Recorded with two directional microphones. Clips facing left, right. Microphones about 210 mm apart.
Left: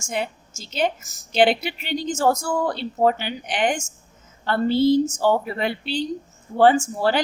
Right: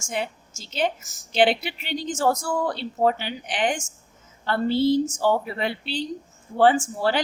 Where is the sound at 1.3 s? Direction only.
45° left (ahead or behind).